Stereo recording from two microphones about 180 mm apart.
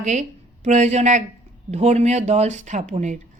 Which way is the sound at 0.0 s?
40° right (ahead or behind).